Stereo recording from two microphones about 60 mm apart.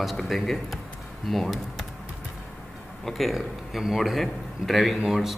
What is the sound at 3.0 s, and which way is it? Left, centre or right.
Speech, centre.